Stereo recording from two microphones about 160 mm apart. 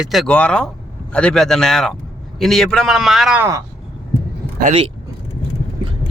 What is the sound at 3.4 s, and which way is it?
Speech, 20° right (ahead or behind).